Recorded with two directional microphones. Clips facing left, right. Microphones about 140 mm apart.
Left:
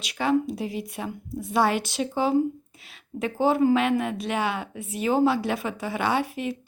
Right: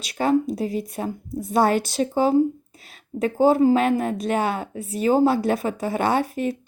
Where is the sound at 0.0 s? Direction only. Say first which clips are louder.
Right 3 dB; 40° right (ahead or behind).